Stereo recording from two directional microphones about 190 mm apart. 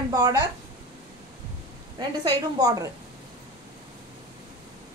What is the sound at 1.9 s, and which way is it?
Speech, 20° right (ahead or behind).